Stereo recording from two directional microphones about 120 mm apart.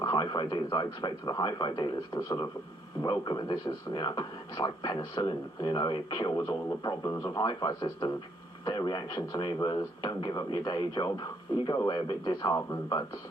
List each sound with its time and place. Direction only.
0.0 s speech: 40° left (ahead or behind)